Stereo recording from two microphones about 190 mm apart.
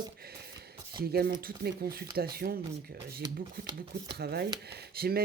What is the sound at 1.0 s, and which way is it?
Speech, 55° right (ahead or behind).